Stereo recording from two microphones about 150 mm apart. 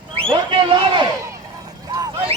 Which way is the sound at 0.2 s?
35° right (ahead or behind).